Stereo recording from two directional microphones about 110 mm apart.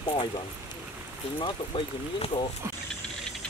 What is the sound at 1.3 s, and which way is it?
Speech, 50° left (ahead or behind).